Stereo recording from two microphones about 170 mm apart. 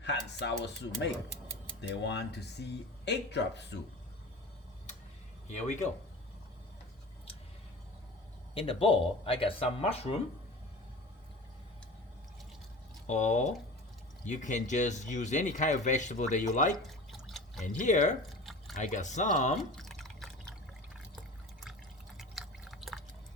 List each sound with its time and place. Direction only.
0.0 s speech: 85° left
5.5 s speech: 45° left (ahead or behind)
8.5 s speech: 35° left (ahead or behind)
13.1 s speech: 45° left (ahead or behind)
16.7 s drip: centre (ahead or behind)
17.6 s speech: 45° left (ahead or behind)
19.7 s drip: centre (ahead or behind)
22.2 s drip: centre (ahead or behind)